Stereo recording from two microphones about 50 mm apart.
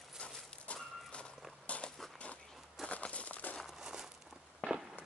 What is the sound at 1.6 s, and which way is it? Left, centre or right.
Walk, left.